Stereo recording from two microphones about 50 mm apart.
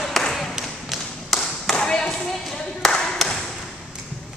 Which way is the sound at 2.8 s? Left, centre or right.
Centre.